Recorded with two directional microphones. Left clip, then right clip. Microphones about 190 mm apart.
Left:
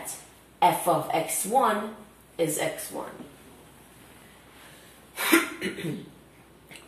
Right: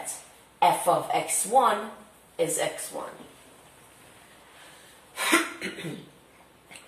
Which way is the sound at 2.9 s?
10° left (ahead or behind).